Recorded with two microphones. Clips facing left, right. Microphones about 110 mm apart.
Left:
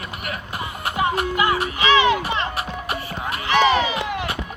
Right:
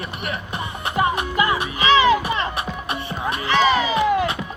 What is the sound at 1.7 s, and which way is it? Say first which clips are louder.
Music: right 3 dB; 35° right (ahead or behind).